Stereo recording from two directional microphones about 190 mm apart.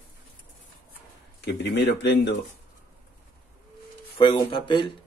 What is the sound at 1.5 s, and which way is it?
Speech, 65° left (ahead or behind).